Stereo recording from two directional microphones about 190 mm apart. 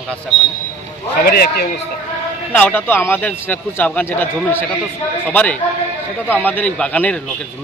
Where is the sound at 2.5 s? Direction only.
10° left (ahead or behind).